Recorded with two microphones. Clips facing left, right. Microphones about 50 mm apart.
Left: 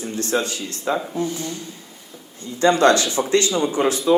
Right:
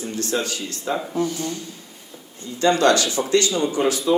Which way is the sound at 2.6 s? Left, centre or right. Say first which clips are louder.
Left 2 dB; left.